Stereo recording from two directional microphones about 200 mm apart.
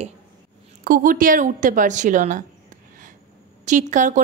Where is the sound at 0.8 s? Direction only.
45° right (ahead or behind).